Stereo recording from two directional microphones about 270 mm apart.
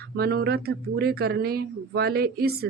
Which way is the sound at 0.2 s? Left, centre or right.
Right.